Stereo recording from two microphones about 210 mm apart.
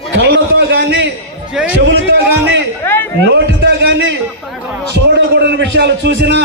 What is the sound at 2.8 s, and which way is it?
Speech, 10° left (ahead or behind).